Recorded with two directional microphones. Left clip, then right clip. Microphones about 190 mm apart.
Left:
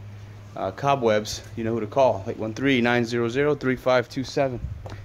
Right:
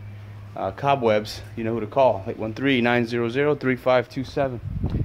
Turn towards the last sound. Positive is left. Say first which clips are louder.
# right 3 dB
turn(degrees=0)  # may be behind; listen again after turning